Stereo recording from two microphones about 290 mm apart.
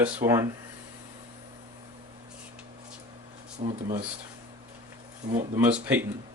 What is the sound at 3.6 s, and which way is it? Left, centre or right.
Speech, right.